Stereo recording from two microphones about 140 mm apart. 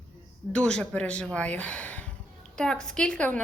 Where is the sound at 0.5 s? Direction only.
5° left (ahead or behind).